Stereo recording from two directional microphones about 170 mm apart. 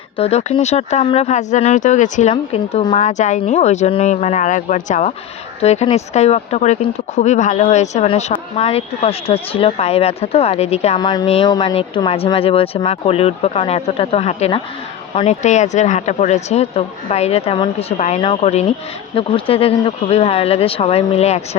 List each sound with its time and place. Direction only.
0.2 s speech: 40° left (ahead or behind)
2.3 s a woman's voice: 30° left (ahead or behind)
10.9 s speech: 25° left (ahead or behind)